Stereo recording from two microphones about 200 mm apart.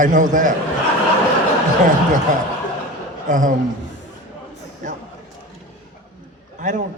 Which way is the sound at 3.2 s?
40° right (ahead or behind).